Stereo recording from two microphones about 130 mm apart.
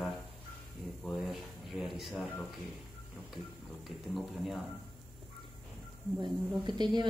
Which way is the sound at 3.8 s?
Centre (ahead or behind).